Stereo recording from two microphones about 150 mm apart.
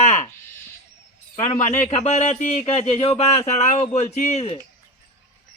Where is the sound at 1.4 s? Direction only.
50° left (ahead or behind).